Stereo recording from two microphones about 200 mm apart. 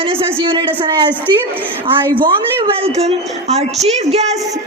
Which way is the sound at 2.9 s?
30° right (ahead or behind).